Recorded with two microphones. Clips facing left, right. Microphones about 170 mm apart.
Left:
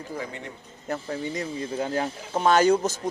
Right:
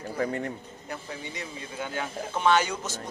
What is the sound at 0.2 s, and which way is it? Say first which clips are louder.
Speech: right 6 dB; 50° right (ahead or behind).